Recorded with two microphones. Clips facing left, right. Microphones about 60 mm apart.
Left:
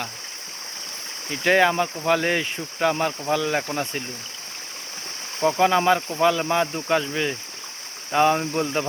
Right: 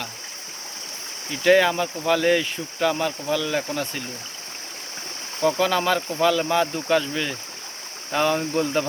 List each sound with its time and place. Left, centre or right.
1.3 s speech: left
5.4 s speech: left